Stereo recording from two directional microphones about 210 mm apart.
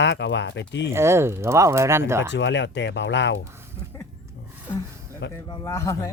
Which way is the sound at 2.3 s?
55° left (ahead or behind).